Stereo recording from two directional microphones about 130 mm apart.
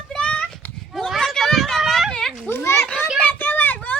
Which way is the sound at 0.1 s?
10° left (ahead or behind).